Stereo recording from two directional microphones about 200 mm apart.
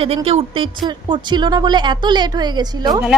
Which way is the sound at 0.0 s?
30° right (ahead or behind).